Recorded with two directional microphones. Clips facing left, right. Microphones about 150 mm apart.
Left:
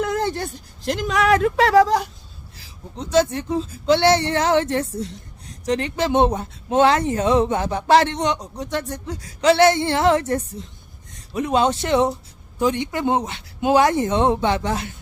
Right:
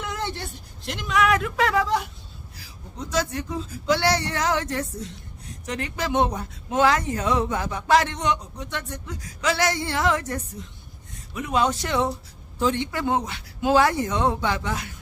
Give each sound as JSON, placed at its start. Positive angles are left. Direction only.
{"t": 0.0, "sound": "a sound", "side_deg": 45}
{"t": 0.9, "sound": "speech", "side_deg": 40}
{"t": 2.6, "sound": "a man's voice", "side_deg": 25}
{"t": 12.5, "sound": "a man's voice", "side_deg": 15}